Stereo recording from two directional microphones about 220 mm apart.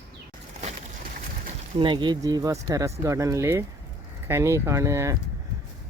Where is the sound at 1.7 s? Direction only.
20° right (ahead or behind).